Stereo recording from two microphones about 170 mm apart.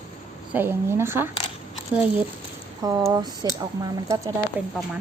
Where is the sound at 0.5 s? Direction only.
15° right (ahead or behind).